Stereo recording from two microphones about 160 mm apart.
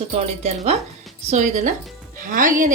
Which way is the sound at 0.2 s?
45° right (ahead or behind).